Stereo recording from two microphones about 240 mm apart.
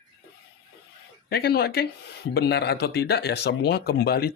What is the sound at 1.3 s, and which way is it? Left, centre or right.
Speech, left.